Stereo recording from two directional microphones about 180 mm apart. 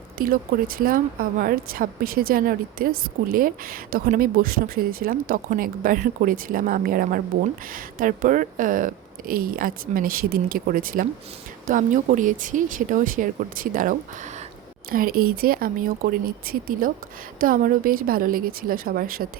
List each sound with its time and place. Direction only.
0.2 s a woman's voice: 55° right (ahead or behind)